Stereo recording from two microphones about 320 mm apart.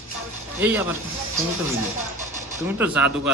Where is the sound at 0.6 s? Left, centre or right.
Centre.